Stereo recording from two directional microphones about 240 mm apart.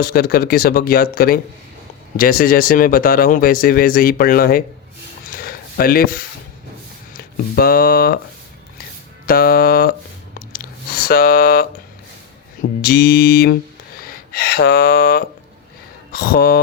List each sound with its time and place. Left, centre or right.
0.0 s speech: left
5.3 s a sound: left
7.5 s speech: left
9.2 s speech: left
11.0 s speech: left
12.8 s speech: left